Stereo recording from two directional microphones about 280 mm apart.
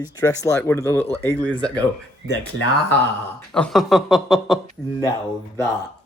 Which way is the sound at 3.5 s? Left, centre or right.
Centre.